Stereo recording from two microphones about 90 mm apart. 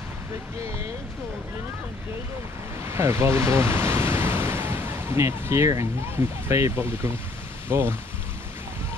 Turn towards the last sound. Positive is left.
turn(degrees=-25)  # may be behind; listen again after turning